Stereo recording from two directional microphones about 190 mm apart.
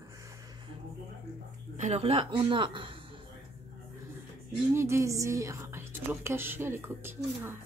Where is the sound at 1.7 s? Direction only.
35° right (ahead or behind).